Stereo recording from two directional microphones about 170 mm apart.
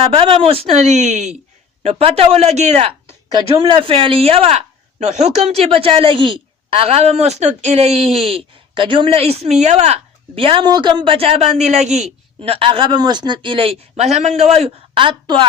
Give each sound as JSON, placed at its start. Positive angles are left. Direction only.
{"t": 0.0, "sound": "speech", "side_deg": -30}
{"t": 3.3, "sound": "speech", "side_deg": -30}